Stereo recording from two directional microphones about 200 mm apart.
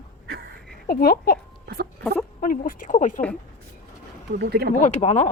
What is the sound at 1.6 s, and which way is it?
Speech, 50° right (ahead or behind).